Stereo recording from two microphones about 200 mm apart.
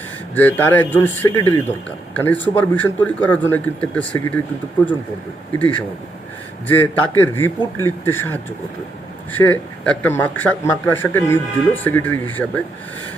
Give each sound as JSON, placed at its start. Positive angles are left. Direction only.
{"t": 0.3, "sound": "a man's voice", "side_deg": 10}
{"t": 5.5, "sound": "a man's voice", "side_deg": 5}